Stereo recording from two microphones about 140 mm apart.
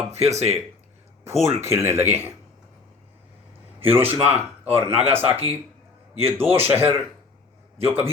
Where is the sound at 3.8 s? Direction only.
15° right (ahead or behind).